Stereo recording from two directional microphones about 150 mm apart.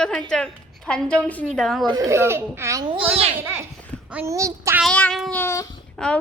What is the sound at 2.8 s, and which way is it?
Speech, 40° right (ahead or behind).